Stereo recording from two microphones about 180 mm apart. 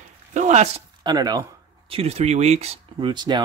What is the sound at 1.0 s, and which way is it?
Speech, 20° right (ahead or behind).